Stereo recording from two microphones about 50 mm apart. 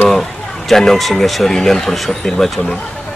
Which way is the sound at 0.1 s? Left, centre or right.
Centre.